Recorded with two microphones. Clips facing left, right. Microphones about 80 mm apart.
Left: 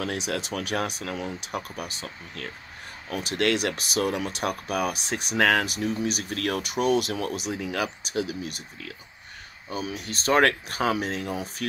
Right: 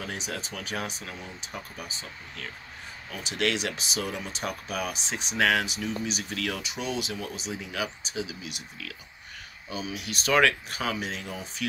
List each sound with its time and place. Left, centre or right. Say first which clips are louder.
0.0 s speech: left 6 dB; left